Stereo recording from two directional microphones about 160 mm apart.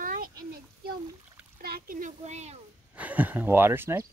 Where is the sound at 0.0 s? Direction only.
60° right (ahead or behind).